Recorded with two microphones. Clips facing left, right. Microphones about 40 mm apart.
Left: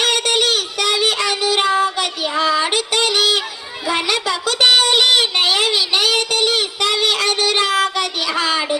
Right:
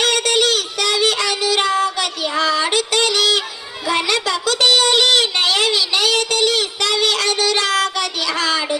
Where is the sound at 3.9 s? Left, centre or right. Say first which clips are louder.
Right 1 dB; centre.